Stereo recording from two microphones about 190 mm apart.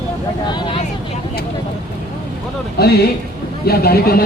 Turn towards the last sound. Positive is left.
turn(degrees=55)  # may be behind; listen again after turning